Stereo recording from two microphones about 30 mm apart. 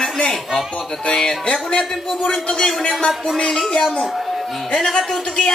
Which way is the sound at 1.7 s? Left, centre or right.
Left.